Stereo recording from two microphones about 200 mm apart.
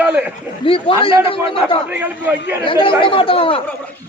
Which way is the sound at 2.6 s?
25° left (ahead or behind).